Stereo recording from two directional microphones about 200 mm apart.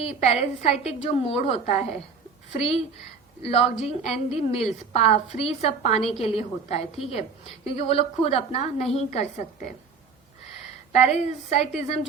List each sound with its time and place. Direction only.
0.0 s a woman's voice: 30° left (ahead or behind)
3.4 s a woman's voice: 30° left (ahead or behind)
10.9 s a woman's voice: 35° left (ahead or behind)